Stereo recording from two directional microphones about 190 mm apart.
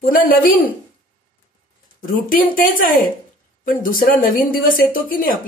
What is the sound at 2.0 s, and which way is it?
Speech, 45° left (ahead or behind).